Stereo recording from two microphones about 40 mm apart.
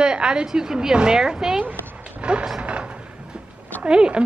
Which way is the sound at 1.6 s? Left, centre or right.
Right.